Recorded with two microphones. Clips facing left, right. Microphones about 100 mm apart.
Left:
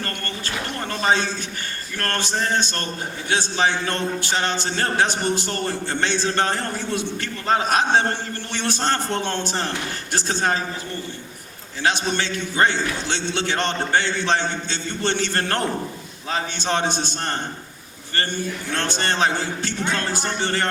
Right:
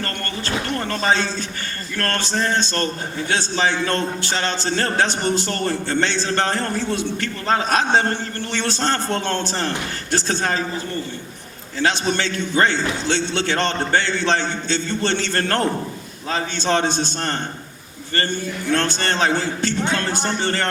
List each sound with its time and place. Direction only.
0.9 s a man's voice: 15° left (ahead or behind)
11.9 s a man's voice: 15° left (ahead or behind)
18.7 s a man's voice: 15° left (ahead or behind)
19.8 s speech: 20° right (ahead or behind)